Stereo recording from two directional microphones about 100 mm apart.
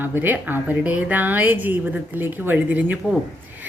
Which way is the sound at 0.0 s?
20° right (ahead or behind).